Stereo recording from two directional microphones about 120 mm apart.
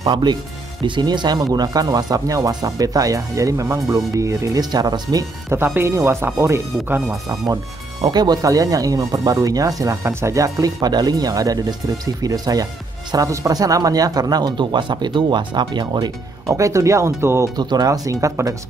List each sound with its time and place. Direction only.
0.0 s speech: 40° right (ahead or behind)
5.1 s speech: 20° right (ahead or behind)
8.1 s speech: 35° right (ahead or behind)
17.6 s speech: 35° right (ahead or behind)